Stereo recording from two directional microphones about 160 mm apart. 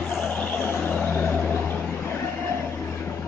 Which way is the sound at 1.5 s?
10° left (ahead or behind).